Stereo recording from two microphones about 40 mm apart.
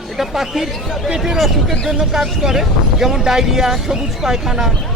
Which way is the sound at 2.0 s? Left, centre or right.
Centre.